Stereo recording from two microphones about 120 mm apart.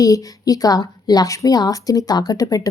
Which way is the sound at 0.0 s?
30° left (ahead or behind).